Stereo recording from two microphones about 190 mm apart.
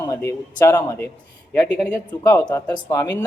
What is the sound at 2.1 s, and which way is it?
A man's voice, 15° left (ahead or behind).